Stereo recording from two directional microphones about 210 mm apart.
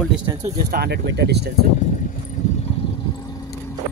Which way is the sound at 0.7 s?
50° right (ahead or behind).